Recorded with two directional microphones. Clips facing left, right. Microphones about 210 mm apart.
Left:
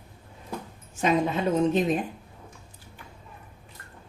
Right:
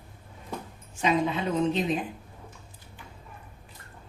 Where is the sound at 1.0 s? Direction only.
45° left (ahead or behind).